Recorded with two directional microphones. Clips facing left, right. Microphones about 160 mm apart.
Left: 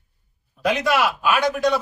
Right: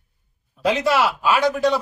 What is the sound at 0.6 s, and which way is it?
A man's voice, 30° right (ahead or behind).